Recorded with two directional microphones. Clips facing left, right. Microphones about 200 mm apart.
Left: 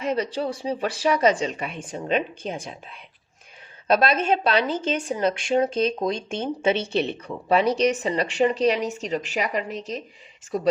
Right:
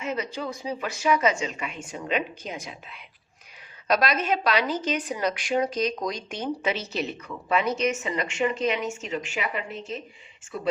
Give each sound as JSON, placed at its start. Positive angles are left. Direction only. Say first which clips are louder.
{"t": 0.0, "sound": "speech", "louder": "left 5 dB", "side_deg": 35}
{"t": 3.8, "sound": "a woman's voice", "louder": "left 4 dB", "side_deg": 30}